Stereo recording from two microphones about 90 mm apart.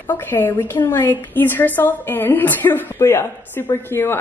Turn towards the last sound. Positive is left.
turn(degrees=25)  # may be behind; listen again after turning